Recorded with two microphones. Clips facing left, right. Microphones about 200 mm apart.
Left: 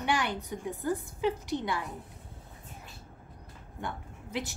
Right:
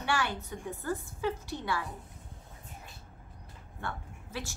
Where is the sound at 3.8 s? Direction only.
20° left (ahead or behind).